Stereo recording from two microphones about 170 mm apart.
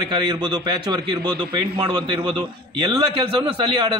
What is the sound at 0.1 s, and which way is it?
A man's voice, 25° right (ahead or behind).